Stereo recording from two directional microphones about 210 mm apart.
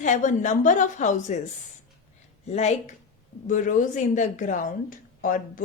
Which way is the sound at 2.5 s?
30° left (ahead or behind).